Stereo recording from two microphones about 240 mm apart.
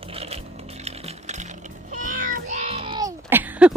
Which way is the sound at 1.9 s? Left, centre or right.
Right.